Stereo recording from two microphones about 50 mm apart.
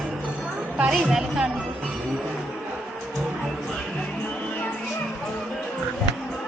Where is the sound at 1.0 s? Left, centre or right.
Centre.